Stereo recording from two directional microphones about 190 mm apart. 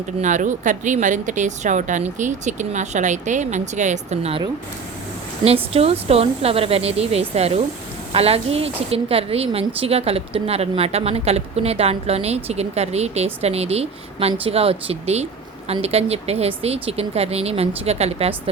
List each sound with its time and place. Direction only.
0.2 s a woman's voice: 40° right (ahead or behind)
5.5 s a woman's voice: 30° right (ahead or behind)